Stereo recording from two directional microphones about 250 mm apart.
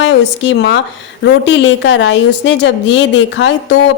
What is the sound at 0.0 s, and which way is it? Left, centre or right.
A woman's voice, left.